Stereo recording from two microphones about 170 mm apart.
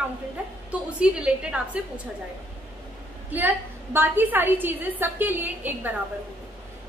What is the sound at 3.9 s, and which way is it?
A woman's voice, 10° right (ahead or behind).